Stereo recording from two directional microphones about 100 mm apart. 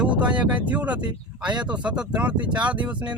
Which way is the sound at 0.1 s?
10° right (ahead or behind).